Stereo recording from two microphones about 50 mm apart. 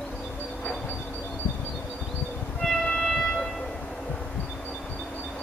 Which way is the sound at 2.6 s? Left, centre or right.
Centre.